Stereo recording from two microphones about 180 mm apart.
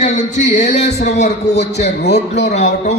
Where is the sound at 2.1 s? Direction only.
40° left (ahead or behind).